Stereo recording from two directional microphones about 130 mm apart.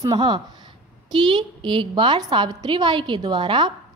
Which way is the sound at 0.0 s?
35° right (ahead or behind).